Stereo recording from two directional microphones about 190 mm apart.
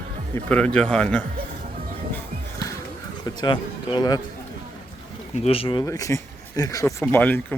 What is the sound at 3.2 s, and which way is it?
Speech, 25° left (ahead or behind).